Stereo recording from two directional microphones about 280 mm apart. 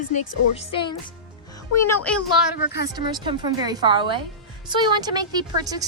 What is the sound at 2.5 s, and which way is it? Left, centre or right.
Speech, left.